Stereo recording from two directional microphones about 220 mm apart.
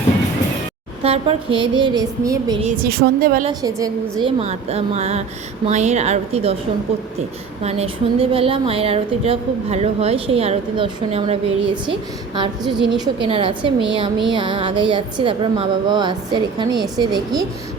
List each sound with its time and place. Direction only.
1.0 s a woman's voice: 25° right (ahead or behind)
2.8 s speech: 45° right (ahead or behind)
3.4 s a woman's voice: 15° right (ahead or behind)
4.4 s a woman's voice: 30° right (ahead or behind)
7.6 s a woman's voice: 30° right (ahead or behind)